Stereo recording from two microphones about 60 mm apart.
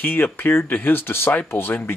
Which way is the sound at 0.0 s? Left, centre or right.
Left.